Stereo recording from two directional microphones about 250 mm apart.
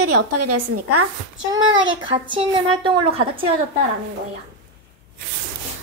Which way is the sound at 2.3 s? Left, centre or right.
Centre.